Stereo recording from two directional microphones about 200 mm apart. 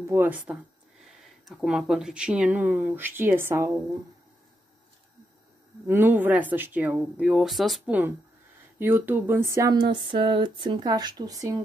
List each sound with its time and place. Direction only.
0.0 s speech: 10° right (ahead or behind)
5.9 s speech: 10° right (ahead or behind)
8.7 s a sound: 10° right (ahead or behind)